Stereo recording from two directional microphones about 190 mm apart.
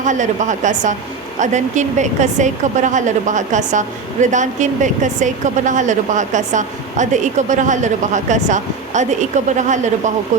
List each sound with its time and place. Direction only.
0.0 s a woman's voice: 40° right (ahead or behind)